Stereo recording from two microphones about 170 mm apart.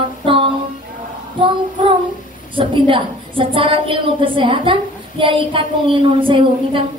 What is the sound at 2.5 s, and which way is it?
A woman's voice, 30° right (ahead or behind).